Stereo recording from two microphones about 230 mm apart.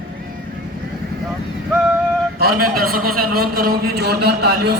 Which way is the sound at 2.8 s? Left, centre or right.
Right.